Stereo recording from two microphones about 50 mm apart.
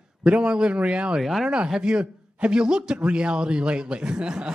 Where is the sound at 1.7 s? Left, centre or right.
Centre.